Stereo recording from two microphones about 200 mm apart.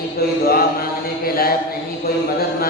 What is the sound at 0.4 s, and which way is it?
Chant, 50° left (ahead or behind).